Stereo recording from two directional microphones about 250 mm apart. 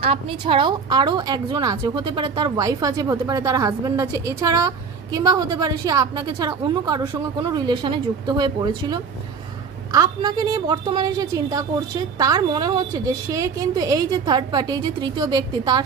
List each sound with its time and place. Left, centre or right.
0.0 s a woman's voice: right